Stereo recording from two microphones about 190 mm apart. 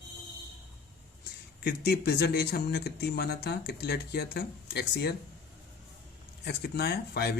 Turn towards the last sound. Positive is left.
turn(degrees=55)  # may be behind; listen again after turning